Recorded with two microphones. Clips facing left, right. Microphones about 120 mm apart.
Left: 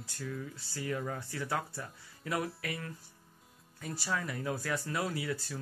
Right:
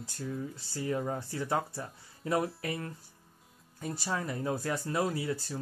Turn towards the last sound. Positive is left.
turn(degrees=-30)  # may be behind; listen again after turning